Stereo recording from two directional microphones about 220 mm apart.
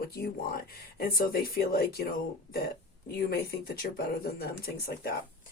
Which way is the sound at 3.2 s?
45° left (ahead or behind).